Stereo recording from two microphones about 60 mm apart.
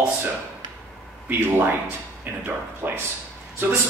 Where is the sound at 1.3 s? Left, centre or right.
Right.